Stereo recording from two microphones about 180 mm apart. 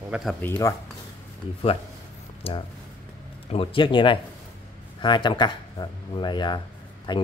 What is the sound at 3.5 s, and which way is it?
Speech, 30° left (ahead or behind).